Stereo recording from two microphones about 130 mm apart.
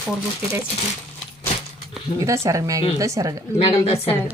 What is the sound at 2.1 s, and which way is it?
Speech, 25° right (ahead or behind).